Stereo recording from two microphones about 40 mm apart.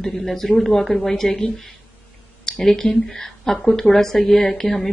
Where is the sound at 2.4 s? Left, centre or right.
Centre.